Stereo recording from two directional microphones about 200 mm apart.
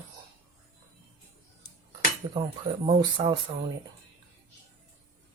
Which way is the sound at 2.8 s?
30° right (ahead or behind).